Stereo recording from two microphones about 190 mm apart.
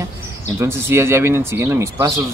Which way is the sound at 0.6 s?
15° right (ahead or behind).